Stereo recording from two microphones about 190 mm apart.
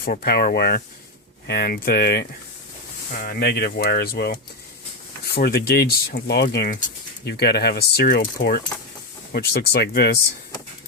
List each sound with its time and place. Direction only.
0.0 s speech: 50° left (ahead or behind)